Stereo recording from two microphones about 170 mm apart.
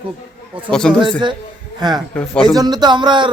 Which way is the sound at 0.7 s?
5° left (ahead or behind).